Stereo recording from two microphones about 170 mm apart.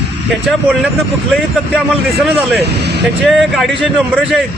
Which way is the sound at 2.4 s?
10° right (ahead or behind).